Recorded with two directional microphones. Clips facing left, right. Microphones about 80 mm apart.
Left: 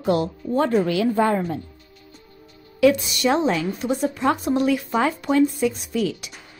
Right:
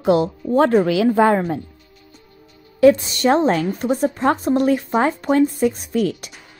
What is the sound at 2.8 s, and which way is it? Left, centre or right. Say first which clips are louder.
A woman's voice: right 5 dB; right.